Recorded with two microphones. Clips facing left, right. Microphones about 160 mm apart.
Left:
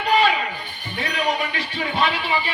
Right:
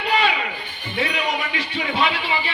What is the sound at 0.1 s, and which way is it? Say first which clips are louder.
Music: left 3 dB; 40° left (ahead or behind).